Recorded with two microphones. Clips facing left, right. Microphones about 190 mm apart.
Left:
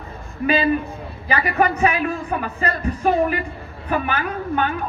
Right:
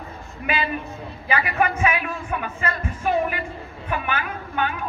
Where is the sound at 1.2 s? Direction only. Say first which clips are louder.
Left 3 dB; 40° left (ahead or behind).